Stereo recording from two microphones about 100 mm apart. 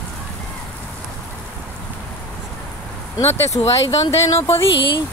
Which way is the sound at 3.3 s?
25° left (ahead or behind).